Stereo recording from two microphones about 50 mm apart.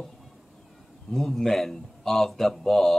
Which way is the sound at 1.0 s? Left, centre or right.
Centre.